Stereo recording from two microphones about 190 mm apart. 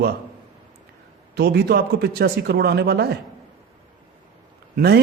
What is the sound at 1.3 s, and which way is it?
A man's voice, 60° right (ahead or behind).